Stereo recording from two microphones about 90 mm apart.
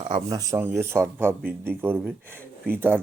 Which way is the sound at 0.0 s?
55° right (ahead or behind).